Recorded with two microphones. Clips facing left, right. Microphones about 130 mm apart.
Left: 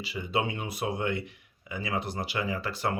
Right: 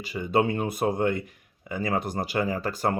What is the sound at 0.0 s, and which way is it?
Speech, 50° right (ahead or behind).